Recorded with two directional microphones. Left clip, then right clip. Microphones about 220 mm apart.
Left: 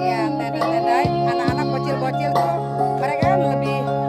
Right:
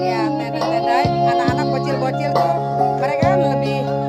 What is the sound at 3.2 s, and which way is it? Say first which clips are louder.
Music: right 2 dB; 10° left (ahead or behind).